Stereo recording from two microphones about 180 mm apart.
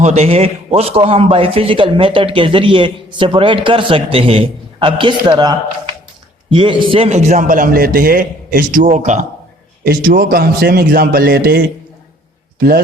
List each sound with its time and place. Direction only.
0.0 s a man's voice: 35° right (ahead or behind)
9.8 s a man's voice: 55° right (ahead or behind)